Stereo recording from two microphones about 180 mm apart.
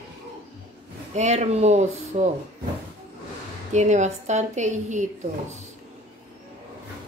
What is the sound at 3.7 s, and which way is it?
A woman's voice, 40° right (ahead or behind).